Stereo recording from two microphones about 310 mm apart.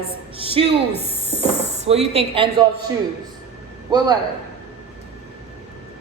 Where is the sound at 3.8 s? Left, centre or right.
Centre.